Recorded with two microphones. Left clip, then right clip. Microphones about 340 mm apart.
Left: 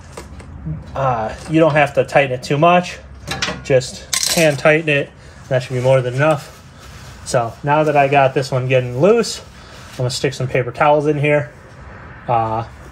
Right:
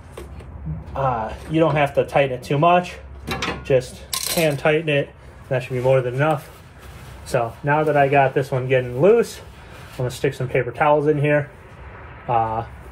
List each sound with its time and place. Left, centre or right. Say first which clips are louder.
0.9 s speech: left 4 dB; left